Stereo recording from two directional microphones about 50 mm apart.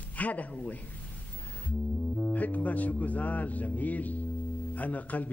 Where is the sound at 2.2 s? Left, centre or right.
Left.